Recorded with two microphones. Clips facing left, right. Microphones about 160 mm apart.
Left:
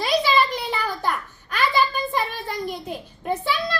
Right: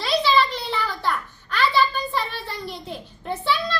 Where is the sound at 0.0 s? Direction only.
15° left (ahead or behind).